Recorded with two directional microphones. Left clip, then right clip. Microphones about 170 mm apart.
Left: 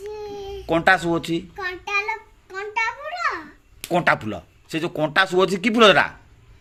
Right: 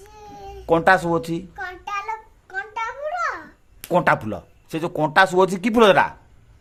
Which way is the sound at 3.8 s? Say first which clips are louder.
Right 1 dB; 30° right (ahead or behind).